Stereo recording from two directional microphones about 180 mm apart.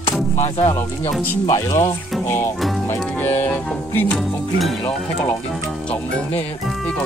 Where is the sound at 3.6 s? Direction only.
10° left (ahead or behind).